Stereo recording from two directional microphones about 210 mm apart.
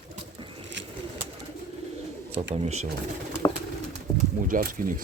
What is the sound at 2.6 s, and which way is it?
Speech, 30° right (ahead or behind).